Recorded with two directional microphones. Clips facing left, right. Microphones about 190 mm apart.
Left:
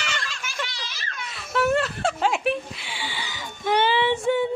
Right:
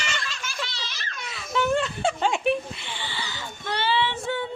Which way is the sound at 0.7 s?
10° left (ahead or behind).